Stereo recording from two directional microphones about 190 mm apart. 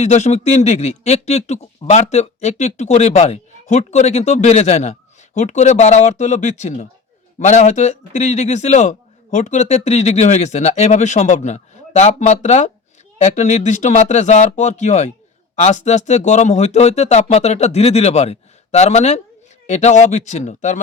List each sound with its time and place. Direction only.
0.0 s a man's voice: 35° left (ahead or behind)